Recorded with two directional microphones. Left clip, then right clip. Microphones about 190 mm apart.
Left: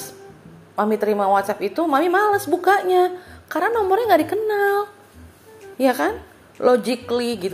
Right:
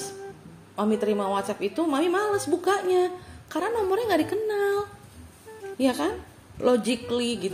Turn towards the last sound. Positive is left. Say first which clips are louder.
# left 5 dB
turn(degrees=-10)  # may be behind; listen again after turning